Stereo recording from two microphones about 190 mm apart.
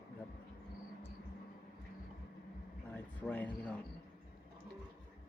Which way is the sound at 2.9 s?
10° left (ahead or behind).